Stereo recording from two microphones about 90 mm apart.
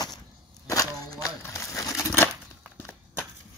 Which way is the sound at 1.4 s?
35° left (ahead or behind).